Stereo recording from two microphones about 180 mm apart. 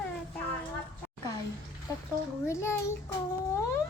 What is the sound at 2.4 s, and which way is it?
Speech, 15° left (ahead or behind).